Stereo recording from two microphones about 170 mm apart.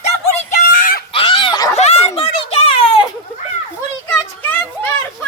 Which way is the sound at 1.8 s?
40° left (ahead or behind).